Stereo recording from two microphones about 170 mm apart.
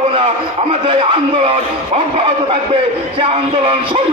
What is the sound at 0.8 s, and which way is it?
A man's voice, 35° right (ahead or behind).